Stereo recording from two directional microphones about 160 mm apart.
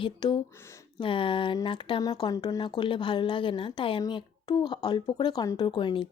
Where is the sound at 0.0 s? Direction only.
30° left (ahead or behind).